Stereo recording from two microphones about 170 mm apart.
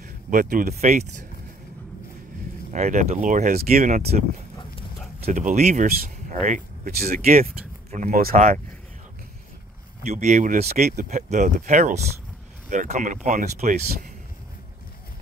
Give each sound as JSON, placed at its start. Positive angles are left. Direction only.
{"t": 0.3, "sound": "speech", "side_deg": -55}
{"t": 0.7, "sound": "speech", "side_deg": -45}
{"t": 2.7, "sound": "speech", "side_deg": -45}
{"t": 5.3, "sound": "speech", "side_deg": -45}
{"t": 10.0, "sound": "speech", "side_deg": -45}